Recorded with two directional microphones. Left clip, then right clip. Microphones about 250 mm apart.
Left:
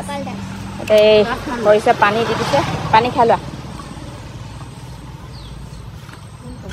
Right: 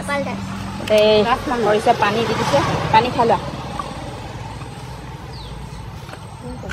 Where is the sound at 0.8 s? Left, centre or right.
Centre.